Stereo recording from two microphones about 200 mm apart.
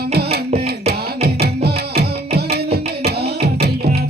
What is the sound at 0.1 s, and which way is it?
Music, 55° right (ahead or behind).